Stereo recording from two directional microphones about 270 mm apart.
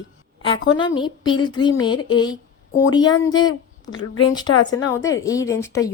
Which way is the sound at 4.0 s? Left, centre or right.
Left.